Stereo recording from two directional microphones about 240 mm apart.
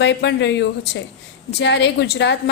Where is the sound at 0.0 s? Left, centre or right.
Left.